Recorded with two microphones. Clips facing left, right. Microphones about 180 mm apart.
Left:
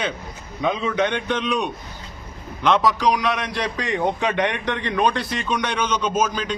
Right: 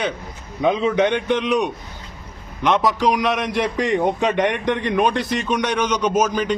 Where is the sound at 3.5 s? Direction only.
15° right (ahead or behind).